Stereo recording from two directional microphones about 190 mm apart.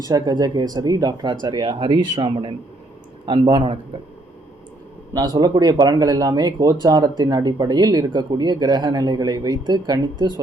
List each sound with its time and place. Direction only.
0.0 s speech: 20° right (ahead or behind)
5.1 s speech: 20° right (ahead or behind)